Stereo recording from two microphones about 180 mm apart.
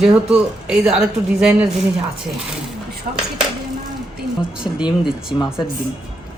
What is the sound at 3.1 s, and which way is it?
Speech, 45° right (ahead or behind).